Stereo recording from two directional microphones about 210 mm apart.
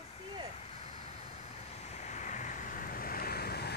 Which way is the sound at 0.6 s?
30° left (ahead or behind).